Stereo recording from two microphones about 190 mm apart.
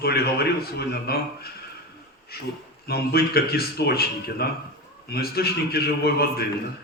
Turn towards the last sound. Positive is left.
turn(degrees=55)  # may be behind; listen again after turning